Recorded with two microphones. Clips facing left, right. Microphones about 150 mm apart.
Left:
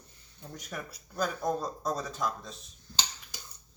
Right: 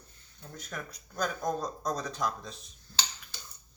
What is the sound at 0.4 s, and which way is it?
Speech, 10° left (ahead or behind).